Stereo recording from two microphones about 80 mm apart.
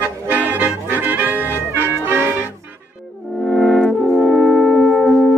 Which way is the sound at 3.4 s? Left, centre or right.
Centre.